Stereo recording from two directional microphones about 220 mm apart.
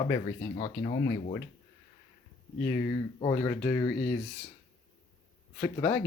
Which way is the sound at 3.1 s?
20° left (ahead or behind).